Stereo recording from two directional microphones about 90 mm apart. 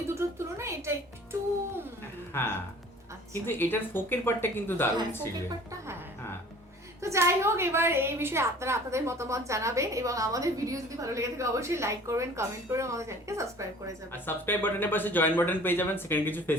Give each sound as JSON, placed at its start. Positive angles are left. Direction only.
{"t": 0.1, "sound": "music", "side_deg": -30}
{"t": 2.3, "sound": "speech", "side_deg": 25}
{"t": 7.0, "sound": "a woman's voice", "side_deg": -30}
{"t": 14.1, "sound": "speech", "side_deg": 25}